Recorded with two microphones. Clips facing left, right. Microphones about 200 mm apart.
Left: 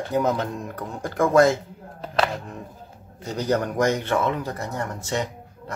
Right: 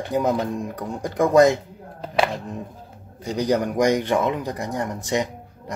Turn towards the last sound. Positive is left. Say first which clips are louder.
# right 2 dB
turn(degrees=-15)  # may be behind; listen again after turning